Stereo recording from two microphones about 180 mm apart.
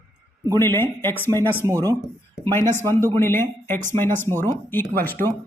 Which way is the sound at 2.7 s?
15° left (ahead or behind).